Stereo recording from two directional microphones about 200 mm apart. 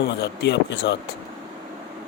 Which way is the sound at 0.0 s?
60° left (ahead or behind).